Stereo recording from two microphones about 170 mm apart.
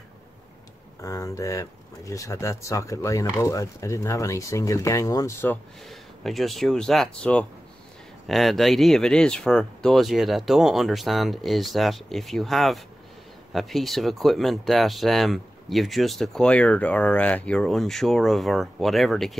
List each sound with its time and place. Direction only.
1.0 s speech: 20° left (ahead or behind)
5.9 s speech: centre (ahead or behind)